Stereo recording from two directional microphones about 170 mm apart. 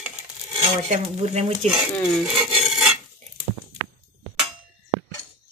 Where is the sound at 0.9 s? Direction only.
40° right (ahead or behind).